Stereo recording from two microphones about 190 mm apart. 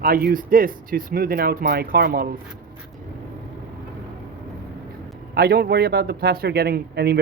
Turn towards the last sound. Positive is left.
turn(degrees=-55)  # may be behind; listen again after turning